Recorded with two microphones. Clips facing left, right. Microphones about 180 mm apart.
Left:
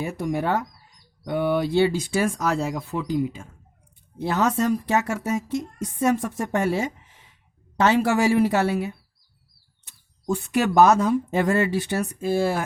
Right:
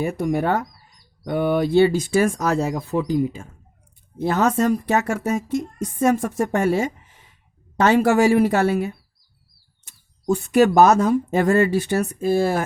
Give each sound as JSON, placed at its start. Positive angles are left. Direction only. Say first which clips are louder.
{"t": 0.0, "sound": "a woman's voice", "louder": "right 4 dB", "side_deg": -50}
{"t": 10.2, "sound": "a woman's voice", "louder": "right 6 dB", "side_deg": -45}